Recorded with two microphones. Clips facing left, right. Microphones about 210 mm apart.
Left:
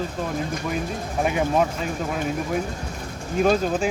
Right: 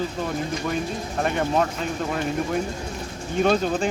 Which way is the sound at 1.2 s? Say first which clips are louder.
Left 1 dB; 5° left (ahead or behind).